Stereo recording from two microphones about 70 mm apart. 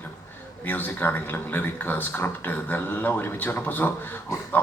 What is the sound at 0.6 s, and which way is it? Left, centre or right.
A man's voice, left.